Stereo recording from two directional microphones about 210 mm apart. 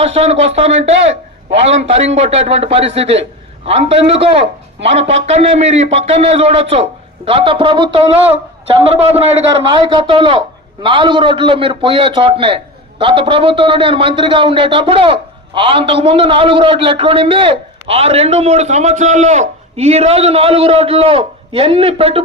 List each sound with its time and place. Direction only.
0.0 s a man's voice: 30° right (ahead or behind)
2.0 s a man's voice: 30° right (ahead or behind)